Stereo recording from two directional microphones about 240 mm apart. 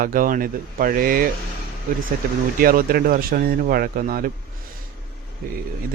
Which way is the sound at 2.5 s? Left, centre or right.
Right.